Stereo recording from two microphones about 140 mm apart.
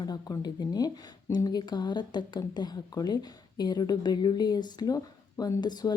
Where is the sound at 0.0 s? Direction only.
30° left (ahead or behind).